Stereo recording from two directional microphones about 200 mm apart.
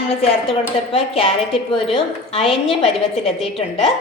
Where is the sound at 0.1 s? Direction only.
30° left (ahead or behind).